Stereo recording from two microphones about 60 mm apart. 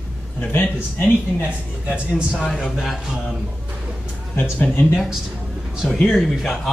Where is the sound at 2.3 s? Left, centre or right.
Centre.